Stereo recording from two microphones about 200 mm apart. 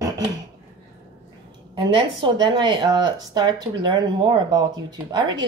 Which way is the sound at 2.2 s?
25° right (ahead or behind).